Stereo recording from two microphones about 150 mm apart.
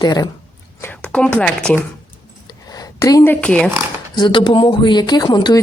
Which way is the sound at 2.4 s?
25° left (ahead or behind).